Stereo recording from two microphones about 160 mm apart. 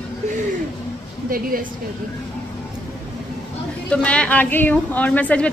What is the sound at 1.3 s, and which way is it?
Speech, 60° right (ahead or behind).